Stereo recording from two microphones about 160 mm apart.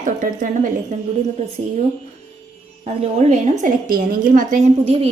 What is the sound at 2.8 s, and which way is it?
A woman's voice, 45° right (ahead or behind).